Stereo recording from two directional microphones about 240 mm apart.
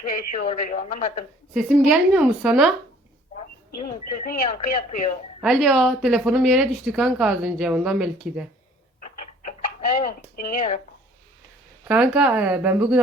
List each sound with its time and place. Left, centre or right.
0.0 s speech: left
1.5 s speech: centre
4.2 s speech: left
5.4 s speech: centre
9.0 s tick-tock: left
10.0 s speech: left
11.9 s speech: centre